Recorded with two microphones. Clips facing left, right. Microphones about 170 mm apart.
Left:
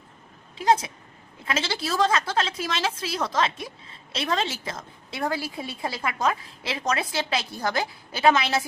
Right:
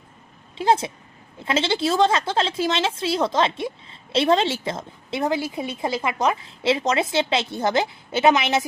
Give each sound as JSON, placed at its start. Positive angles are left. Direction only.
{"t": 0.5, "sound": "a woman's voice", "side_deg": -25}